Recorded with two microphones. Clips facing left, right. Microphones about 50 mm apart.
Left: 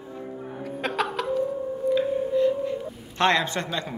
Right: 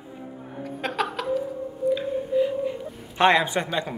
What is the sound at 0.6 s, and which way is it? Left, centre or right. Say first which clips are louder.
Music: even; centre.